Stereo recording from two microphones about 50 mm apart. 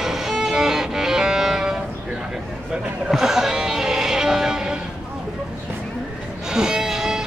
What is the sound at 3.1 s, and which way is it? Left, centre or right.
Music, centre.